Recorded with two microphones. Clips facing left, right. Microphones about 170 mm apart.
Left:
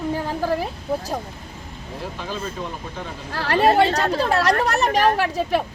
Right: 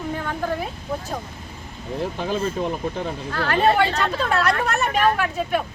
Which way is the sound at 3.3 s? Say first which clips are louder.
Left 2 dB; 35° left (ahead or behind).